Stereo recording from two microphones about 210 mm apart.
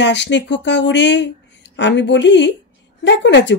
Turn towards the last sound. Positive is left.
turn(degrees=55)  # may be behind; listen again after turning